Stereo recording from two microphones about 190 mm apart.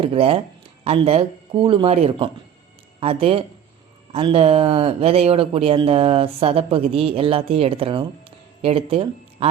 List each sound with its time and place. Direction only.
0.0 s speech: 30° right (ahead or behind)